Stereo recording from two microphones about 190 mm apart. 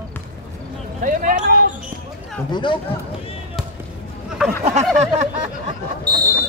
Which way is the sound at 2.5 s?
25° left (ahead or behind).